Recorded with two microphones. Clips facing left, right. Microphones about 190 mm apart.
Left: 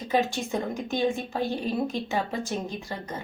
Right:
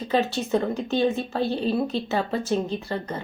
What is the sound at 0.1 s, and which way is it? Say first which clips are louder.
A woman's voice: right 3 dB; 15° left (ahead or behind).